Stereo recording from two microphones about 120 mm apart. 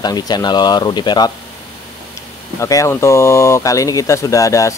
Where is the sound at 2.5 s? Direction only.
25° left (ahead or behind).